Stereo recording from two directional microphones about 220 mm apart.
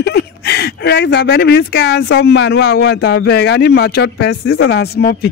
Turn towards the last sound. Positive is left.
turn(degrees=45)  # may be behind; listen again after turning